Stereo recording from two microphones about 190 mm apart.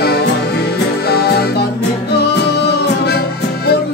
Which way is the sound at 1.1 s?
55° left (ahead or behind).